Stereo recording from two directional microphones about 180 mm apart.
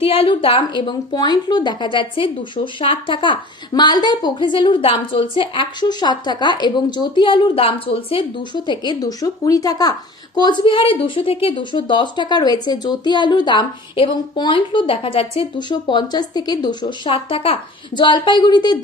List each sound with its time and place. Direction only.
0.0 s speech: 30° left (ahead or behind)